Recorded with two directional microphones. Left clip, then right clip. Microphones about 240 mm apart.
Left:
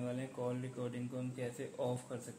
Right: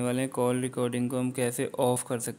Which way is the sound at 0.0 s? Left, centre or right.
Right.